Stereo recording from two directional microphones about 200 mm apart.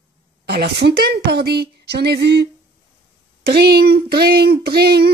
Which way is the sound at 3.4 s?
55° right (ahead or behind).